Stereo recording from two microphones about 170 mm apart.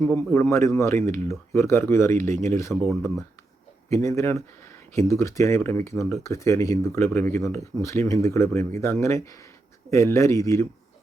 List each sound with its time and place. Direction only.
0.3 s speech: 15° left (ahead or behind)